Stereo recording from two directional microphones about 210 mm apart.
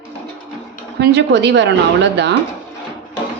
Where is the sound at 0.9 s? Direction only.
55° right (ahead or behind).